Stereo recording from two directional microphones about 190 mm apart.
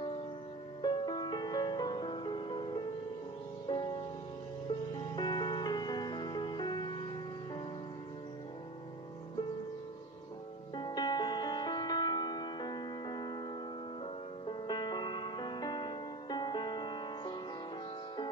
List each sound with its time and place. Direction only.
0.8 s music: 25° left (ahead or behind)
5.1 s music: 25° left (ahead or behind)
10.8 s music: 25° left (ahead or behind)
14.4 s music: 25° left (ahead or behind)